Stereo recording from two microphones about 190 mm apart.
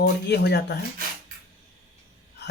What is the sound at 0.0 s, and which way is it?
Speech, 60° left (ahead or behind).